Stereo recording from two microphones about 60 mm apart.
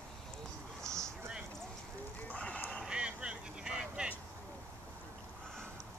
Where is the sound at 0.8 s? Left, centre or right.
Right.